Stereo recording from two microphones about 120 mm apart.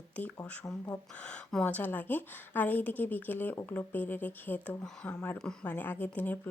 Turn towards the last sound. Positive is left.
turn(degrees=15)  # may be behind; listen again after turning